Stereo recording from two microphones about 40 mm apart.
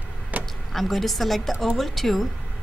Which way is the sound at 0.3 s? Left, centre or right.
Right.